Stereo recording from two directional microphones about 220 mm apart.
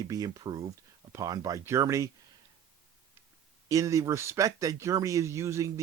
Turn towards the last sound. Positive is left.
turn(degrees=-15)  # may be behind; listen again after turning